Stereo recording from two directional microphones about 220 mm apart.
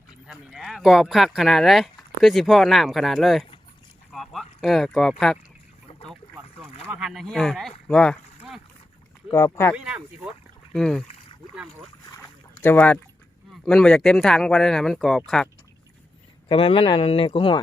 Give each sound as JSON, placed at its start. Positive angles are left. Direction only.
{"t": 0.1, "sound": "speech", "side_deg": 0}
{"t": 6.8, "sound": "speech", "side_deg": -5}
{"t": 9.3, "sound": "speech", "side_deg": 10}
{"t": 9.7, "sound": "speech", "side_deg": -5}
{"t": 12.6, "sound": "speech", "side_deg": 5}
{"t": 16.5, "sound": "speech", "side_deg": 25}